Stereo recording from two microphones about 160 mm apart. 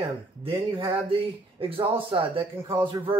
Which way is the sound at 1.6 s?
35° right (ahead or behind).